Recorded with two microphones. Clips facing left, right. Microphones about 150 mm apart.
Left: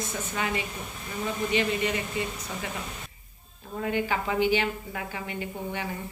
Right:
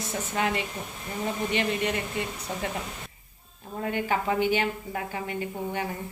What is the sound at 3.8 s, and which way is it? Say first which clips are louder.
A woman's voice: even; 45° right (ahead or behind).